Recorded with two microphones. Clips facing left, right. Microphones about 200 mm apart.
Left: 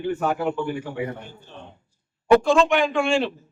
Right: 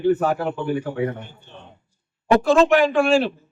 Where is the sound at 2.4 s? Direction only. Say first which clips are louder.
Right 3 dB; centre (ahead or behind).